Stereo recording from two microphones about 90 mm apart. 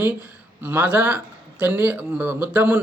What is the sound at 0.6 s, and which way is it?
Speech, 20° right (ahead or behind).